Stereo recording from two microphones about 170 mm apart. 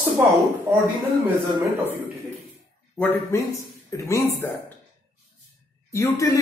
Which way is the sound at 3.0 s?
15° left (ahead or behind).